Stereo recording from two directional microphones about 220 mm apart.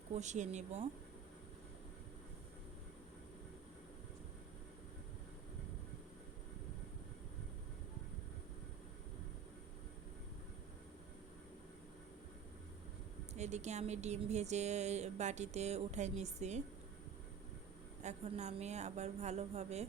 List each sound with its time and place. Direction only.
0.1 s speech: 30° right (ahead or behind)
13.3 s speech: 30° right (ahead or behind)
18.0 s speech: 30° right (ahead or behind)